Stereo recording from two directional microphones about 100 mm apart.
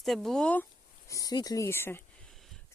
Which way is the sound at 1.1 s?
35° left (ahead or behind).